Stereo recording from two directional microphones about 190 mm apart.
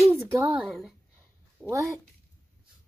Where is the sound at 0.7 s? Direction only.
Centre (ahead or behind).